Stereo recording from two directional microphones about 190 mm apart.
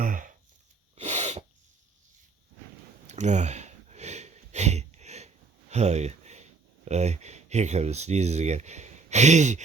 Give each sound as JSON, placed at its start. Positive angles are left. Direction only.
{"t": 0.0, "sound": "a sound", "side_deg": -45}
{"t": 0.9, "sound": "sneeze", "side_deg": -40}
{"t": 3.1, "sound": "sniff", "side_deg": -40}